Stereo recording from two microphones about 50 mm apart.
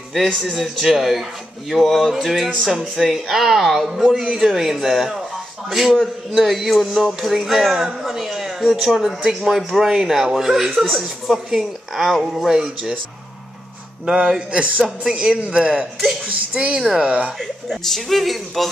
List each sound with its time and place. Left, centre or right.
0.6 s speech: centre
14.0 s a man's voice: right
17.4 s speech: centre